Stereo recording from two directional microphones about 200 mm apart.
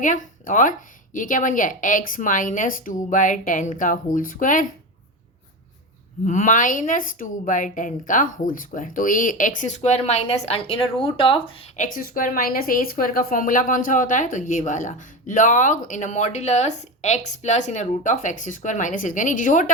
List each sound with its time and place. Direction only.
0.0 s a woman's voice: 40° left (ahead or behind)
6.2 s a woman's voice: 40° left (ahead or behind)
11.8 s a woman's voice: 45° left (ahead or behind)